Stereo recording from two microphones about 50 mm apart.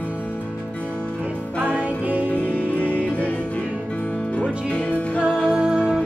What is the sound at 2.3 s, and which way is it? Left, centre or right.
Music, left.